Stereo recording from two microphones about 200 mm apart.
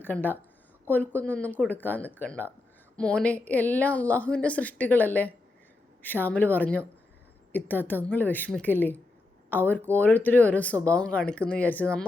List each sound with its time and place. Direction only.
0.0 s speech: 10° left (ahead or behind)